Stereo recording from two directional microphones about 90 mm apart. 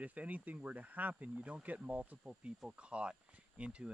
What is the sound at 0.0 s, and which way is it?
Speech, 15° right (ahead or behind).